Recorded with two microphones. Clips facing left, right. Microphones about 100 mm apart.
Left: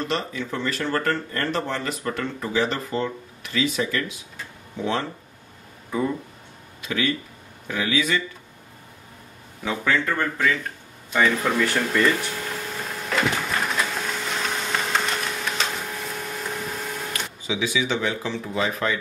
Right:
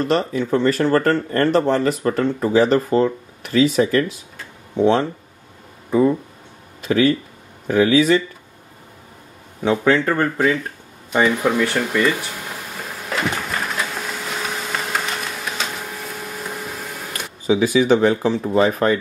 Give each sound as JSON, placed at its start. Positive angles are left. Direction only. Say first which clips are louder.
{"t": 0.0, "sound": "speech", "louder": "right 8 dB", "side_deg": -40}
{"t": 4.7, "sound": "a man's voice", "louder": "right 10 dB", "side_deg": -30}
{"t": 6.8, "sound": "speech", "louder": "right 9 dB", "side_deg": -40}
{"t": 9.6, "sound": "a man's voice", "louder": "right 7 dB", "side_deg": -25}
{"t": 11.1, "sound": "speech", "louder": "right 4 dB", "side_deg": -15}
{"t": 13.1, "sound": "wood", "louder": "right 1 dB", "side_deg": 0}
{"t": 16.2, "sound": "vacuum cleaner", "louder": "right 1 dB", "side_deg": -5}
{"t": 17.5, "sound": "speech", "louder": "right 10 dB", "side_deg": -45}